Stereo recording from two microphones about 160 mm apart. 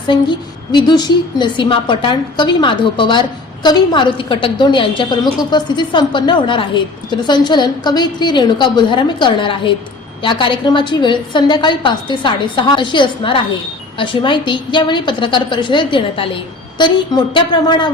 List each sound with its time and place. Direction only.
0.1 s a woman's voice: 30° left (ahead or behind)
17.3 s a woman's voice: 30° left (ahead or behind)